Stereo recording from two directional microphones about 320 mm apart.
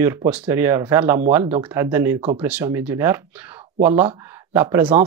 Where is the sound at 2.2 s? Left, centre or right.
Centre.